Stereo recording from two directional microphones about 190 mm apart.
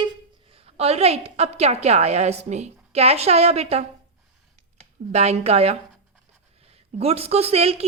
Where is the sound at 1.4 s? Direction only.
35° right (ahead or behind).